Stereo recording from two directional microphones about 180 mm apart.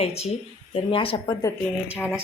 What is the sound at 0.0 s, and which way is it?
Speech, 35° left (ahead or behind).